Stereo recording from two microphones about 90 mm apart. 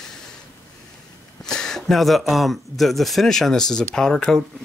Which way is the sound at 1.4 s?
5° left (ahead or behind).